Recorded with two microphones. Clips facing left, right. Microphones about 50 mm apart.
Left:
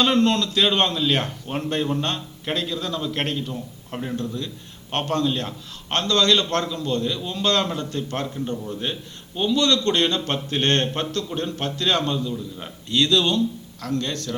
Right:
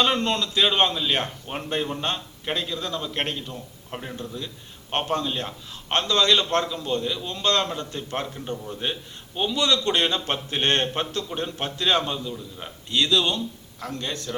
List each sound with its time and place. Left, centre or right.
0.0 s a man's voice: centre